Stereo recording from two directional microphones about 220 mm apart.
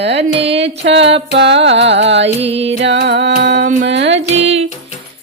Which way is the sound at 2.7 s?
55° right (ahead or behind).